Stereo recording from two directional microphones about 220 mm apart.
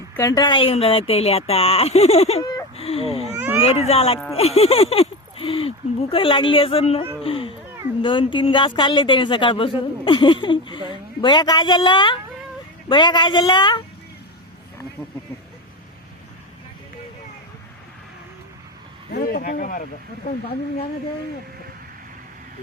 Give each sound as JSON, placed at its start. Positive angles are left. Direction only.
{"t": 0.2, "sound": "speech", "side_deg": 15}
{"t": 3.3, "sound": "a sound", "side_deg": -10}
{"t": 3.6, "sound": "speech", "side_deg": 30}
{"t": 19.1, "sound": "speech", "side_deg": 40}